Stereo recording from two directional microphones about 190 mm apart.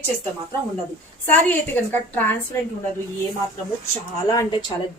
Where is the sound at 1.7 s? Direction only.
10° left (ahead or behind).